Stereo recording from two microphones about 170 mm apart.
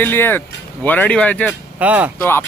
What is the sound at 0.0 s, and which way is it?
Speech, 10° left (ahead or behind).